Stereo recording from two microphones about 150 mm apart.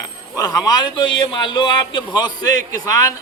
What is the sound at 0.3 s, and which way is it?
A man's voice, 25° left (ahead or behind).